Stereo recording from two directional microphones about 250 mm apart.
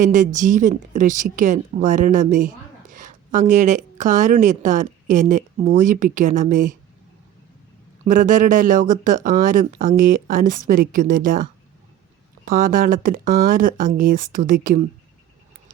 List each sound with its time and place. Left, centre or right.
0.0 s speech: right
8.0 s speech: right
12.5 s speech: right